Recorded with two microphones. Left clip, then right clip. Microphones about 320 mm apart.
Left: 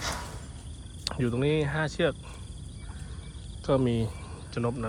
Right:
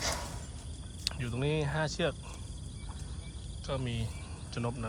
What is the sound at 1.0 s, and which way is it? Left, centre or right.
Speech, centre.